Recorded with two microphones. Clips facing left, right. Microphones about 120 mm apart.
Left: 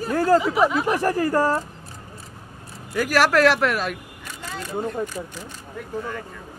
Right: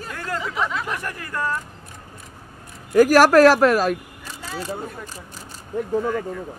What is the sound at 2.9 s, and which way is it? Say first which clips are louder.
Speech: right 7 dB; 45° right (ahead or behind).